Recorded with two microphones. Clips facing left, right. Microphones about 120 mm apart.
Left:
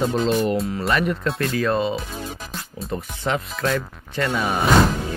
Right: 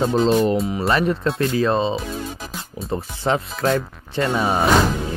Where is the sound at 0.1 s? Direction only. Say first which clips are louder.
Right 3 dB; 30° right (ahead or behind).